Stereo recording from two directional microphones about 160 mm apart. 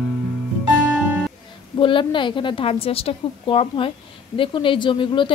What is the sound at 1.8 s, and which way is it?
Speech, 30° left (ahead or behind).